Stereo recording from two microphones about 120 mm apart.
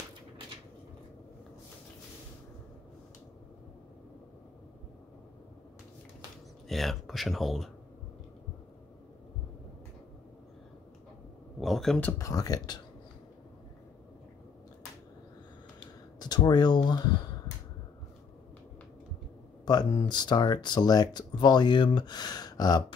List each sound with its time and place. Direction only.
6.7 s speech: centre (ahead or behind)
11.6 s speech: centre (ahead or behind)
12.0 s speech: 25° left (ahead or behind)
16.2 s speech: 35° left (ahead or behind)
19.6 s speech: 35° left (ahead or behind)